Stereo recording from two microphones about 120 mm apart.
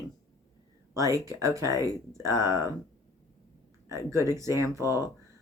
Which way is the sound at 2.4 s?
25° right (ahead or behind).